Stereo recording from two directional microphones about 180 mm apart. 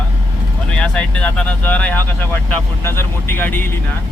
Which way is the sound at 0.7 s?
5° left (ahead or behind).